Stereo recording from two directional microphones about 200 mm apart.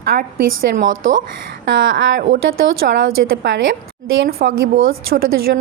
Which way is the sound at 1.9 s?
60° right (ahead or behind).